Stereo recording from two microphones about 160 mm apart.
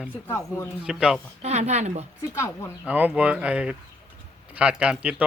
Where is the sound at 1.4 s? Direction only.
45° right (ahead or behind).